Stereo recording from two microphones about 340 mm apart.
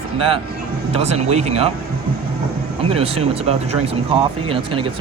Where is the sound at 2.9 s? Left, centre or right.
Centre.